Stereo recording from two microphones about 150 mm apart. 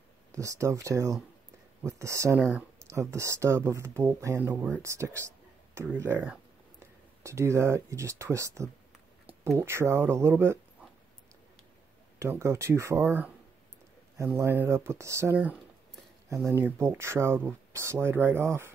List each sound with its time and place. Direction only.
0.3 s speech: 20° right (ahead or behind)
9.2 s a sound: 10° right (ahead or behind)
9.6 s speech: 15° right (ahead or behind)
12.2 s speech: 20° right (ahead or behind)